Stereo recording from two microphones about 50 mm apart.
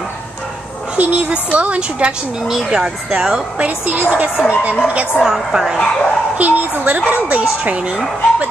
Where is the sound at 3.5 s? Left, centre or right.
Right.